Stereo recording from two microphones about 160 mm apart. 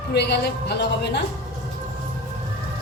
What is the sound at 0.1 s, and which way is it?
A woman's voice, 90° left.